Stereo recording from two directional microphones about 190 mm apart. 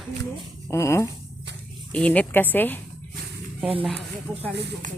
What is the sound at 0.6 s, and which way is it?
Speech, 15° left (ahead or behind).